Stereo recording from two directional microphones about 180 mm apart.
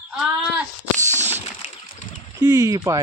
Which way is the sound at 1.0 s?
15° right (ahead or behind).